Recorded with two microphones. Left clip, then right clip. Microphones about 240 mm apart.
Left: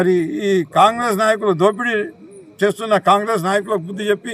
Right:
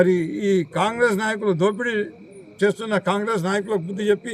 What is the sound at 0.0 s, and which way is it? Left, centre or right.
Speech, centre.